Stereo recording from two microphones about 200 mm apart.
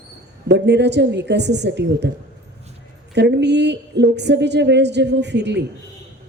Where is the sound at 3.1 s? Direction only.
60° right (ahead or behind).